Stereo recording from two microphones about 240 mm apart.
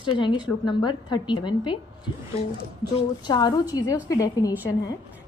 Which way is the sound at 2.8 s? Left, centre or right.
Centre.